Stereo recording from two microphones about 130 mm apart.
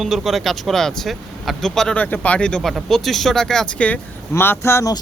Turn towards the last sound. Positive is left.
turn(degrees=25)  # may be behind; listen again after turning